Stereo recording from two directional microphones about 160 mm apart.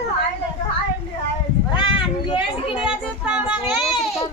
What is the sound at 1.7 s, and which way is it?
Children playing, 30° left (ahead or behind).